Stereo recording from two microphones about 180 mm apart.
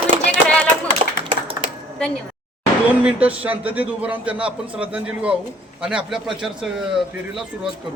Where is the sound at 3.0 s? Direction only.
5° right (ahead or behind).